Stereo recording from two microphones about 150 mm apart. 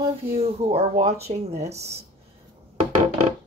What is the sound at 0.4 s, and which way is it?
Speech, 40° right (ahead or behind).